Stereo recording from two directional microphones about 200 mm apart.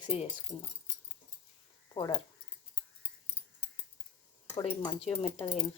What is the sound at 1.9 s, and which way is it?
Speech, 20° left (ahead or behind).